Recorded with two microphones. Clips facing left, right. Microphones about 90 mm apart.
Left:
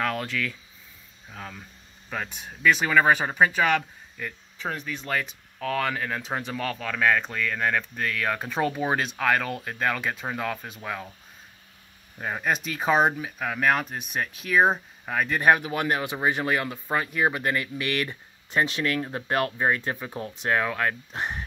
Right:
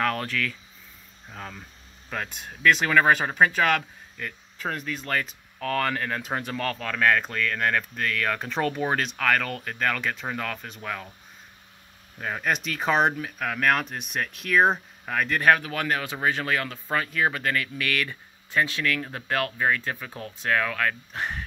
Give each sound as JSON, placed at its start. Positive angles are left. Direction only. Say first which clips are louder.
{"t": 0.0, "sound": "speech", "louder": "right 1 dB", "side_deg": 5}
{"t": 12.2, "sound": "speech", "louder": "even", "side_deg": 10}